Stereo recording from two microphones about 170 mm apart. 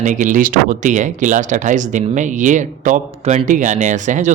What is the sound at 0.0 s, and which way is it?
Speech, 50° right (ahead or behind).